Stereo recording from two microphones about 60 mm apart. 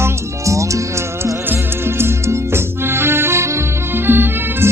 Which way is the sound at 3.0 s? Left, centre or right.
Right.